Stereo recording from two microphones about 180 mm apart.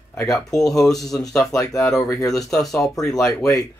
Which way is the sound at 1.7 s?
Centre (ahead or behind).